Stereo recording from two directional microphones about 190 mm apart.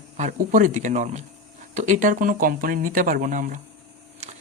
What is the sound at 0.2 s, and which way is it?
Speech, 45° right (ahead or behind).